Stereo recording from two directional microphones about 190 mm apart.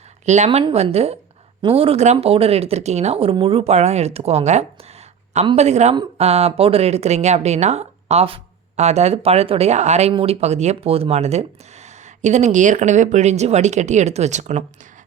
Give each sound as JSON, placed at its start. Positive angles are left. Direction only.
{"t": 0.3, "sound": "speech", "side_deg": -35}